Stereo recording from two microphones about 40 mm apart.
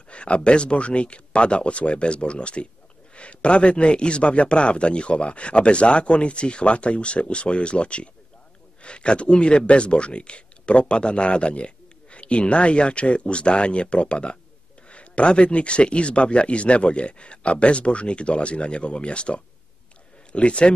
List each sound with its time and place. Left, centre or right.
0.1 s speech: left